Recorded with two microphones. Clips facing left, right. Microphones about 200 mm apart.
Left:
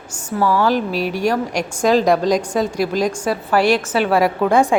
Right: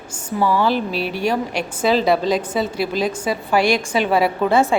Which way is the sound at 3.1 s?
10° right (ahead or behind).